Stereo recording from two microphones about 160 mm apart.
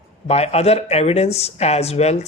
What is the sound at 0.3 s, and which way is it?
A woman's voice, 40° left (ahead or behind).